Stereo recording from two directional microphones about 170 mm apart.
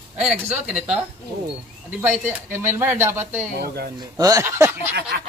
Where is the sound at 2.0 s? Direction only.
10° right (ahead or behind).